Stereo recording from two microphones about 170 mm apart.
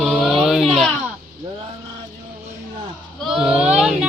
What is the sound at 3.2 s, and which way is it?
Speech, centre (ahead or behind).